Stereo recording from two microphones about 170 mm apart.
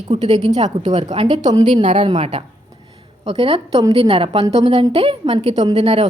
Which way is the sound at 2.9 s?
30° right (ahead or behind).